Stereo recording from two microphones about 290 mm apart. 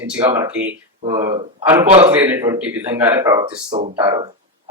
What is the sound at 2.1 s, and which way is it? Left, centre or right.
Speech, centre.